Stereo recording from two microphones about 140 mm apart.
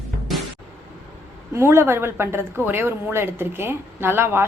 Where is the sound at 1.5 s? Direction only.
20° right (ahead or behind).